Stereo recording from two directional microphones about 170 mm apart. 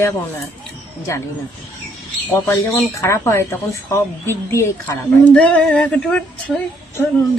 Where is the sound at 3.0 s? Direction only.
15° left (ahead or behind).